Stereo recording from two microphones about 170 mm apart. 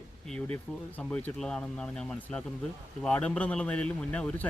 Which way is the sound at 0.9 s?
10° left (ahead or behind).